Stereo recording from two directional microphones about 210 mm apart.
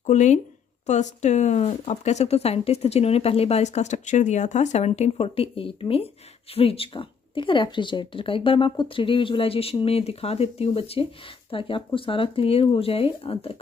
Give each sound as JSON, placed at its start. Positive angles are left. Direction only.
{"t": 0.0, "sound": "speech", "side_deg": 35}